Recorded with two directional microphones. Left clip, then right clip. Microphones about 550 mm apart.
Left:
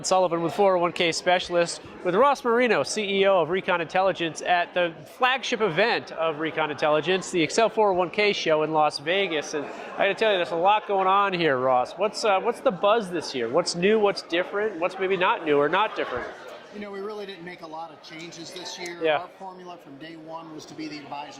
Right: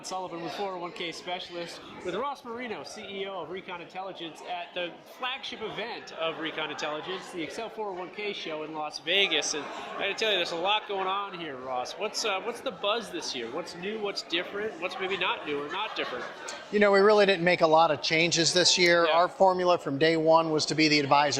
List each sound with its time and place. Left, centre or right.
0.1 s speech: left
6.1 s speech: left
16.8 s speech: centre